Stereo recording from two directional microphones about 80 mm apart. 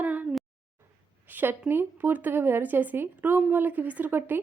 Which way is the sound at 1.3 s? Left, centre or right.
Right.